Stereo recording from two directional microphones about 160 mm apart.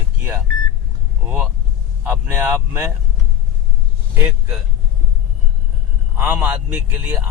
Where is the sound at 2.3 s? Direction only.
15° right (ahead or behind).